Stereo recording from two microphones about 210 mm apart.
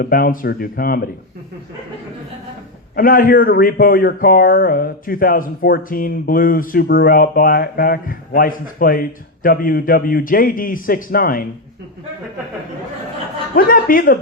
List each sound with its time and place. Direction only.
0.0 s a man's voice: 45° left (ahead or behind)
2.9 s a man's voice: 40° left (ahead or behind)
13.6 s a man's voice: 45° left (ahead or behind)